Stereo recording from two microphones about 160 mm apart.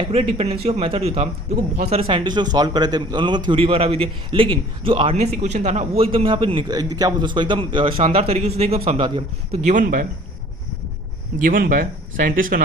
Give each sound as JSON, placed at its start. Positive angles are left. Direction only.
{"t": 0.0, "sound": "a man's voice", "side_deg": -40}
{"t": 5.4, "sound": "a man's voice", "side_deg": -45}
{"t": 9.6, "sound": "speech", "side_deg": -55}
{"t": 11.4, "sound": "speech", "side_deg": -60}